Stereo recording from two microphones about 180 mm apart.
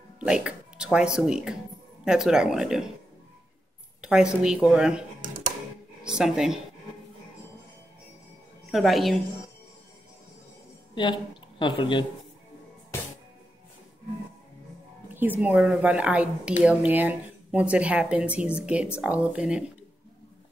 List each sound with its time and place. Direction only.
0.2 s a woman's voice: 5° right (ahead or behind)
4.0 s a woman's voice: 5° right (ahead or behind)
6.0 s a woman's voice: 5° right (ahead or behind)
8.7 s a woman's voice: centre (ahead or behind)
11.0 s speech: 25° left (ahead or behind)
15.1 s speech: 10° right (ahead or behind)